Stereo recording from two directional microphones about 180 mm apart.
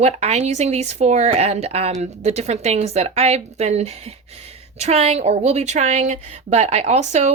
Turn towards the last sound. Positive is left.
turn(degrees=-40)  # may be behind; listen again after turning